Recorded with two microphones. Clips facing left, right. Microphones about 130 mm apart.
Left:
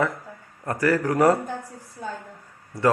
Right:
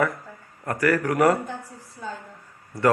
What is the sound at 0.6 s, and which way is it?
Speech, 25° left (ahead or behind).